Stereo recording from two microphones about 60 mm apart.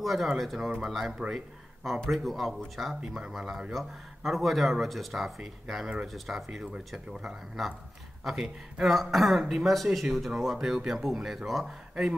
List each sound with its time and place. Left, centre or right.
0.0 s speech: centre
1.3 s a sound: centre
2.0 s speech: centre
8.2 s speech: centre
11.9 s speech: centre